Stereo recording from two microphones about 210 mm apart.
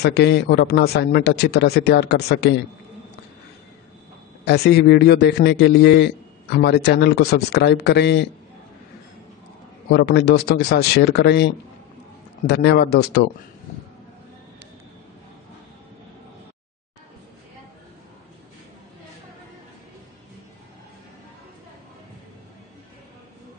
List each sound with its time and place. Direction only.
0.0 s a man's voice: 50° left (ahead or behind)
4.5 s a man's voice: 50° left (ahead or behind)
9.8 s a man's voice: 50° left (ahead or behind)